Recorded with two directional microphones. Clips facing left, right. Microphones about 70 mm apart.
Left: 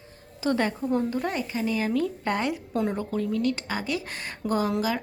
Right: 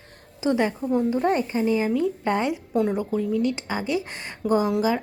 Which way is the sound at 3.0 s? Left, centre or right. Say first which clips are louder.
Right 3 dB; centre.